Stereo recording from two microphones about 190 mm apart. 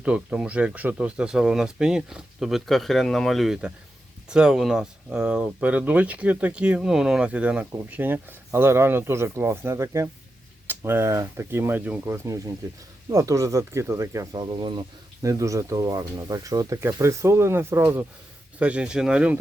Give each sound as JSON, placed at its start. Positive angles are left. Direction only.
{"t": 0.0, "sound": "speech", "side_deg": -5}